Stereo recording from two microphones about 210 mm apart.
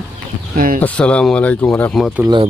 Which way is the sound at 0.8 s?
5° left (ahead or behind).